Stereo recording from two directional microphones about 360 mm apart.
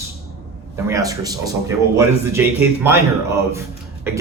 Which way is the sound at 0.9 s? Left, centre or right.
Centre.